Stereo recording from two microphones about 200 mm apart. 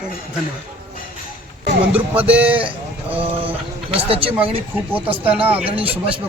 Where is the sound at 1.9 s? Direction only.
5° right (ahead or behind).